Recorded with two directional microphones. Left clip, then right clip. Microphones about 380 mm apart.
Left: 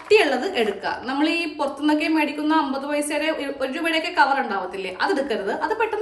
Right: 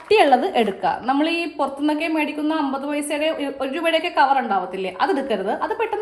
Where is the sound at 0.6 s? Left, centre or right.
Centre.